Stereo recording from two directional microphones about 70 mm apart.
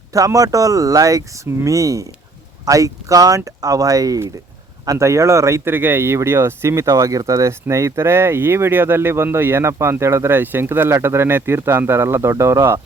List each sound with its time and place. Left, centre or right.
0.3 s speech: right
4.9 s speech: right
5.6 s speech: right